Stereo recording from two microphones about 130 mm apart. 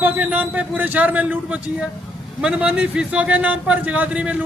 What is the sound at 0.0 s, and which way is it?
A man's voice, 15° right (ahead or behind).